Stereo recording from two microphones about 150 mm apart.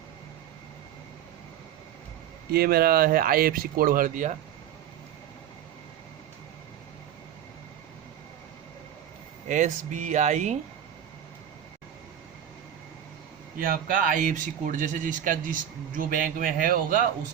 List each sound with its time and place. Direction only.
2.5 s speech: 90° right; by 4.4 s 55° right (ahead or behind)
9.5 s speech: 55° right (ahead or behind)
13.6 s speech: 65° right (ahead or behind)